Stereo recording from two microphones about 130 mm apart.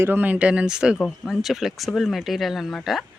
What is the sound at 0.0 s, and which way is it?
Speech, 15° right (ahead or behind).